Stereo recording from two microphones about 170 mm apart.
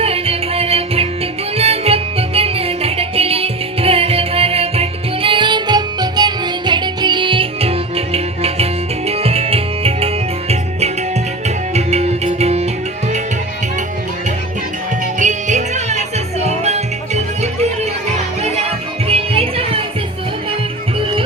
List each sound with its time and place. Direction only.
0.0 s music: 35° right (ahead or behind)
15.2 s music: 45° right (ahead or behind)
19.0 s music: 35° right (ahead or behind)